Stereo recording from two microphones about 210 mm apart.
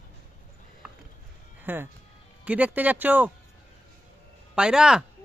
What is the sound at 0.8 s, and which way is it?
Music, 5° right (ahead or behind).